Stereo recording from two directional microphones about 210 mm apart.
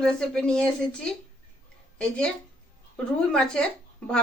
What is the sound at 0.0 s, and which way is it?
Speech, 5° left (ahead or behind).